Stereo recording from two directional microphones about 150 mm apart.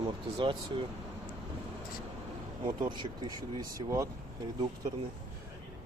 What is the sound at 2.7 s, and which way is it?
Speech, 25° right (ahead or behind).